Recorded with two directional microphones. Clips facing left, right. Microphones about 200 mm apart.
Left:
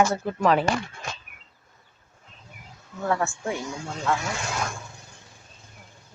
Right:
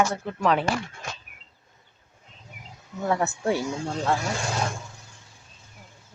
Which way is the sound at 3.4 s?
35° right (ahead or behind).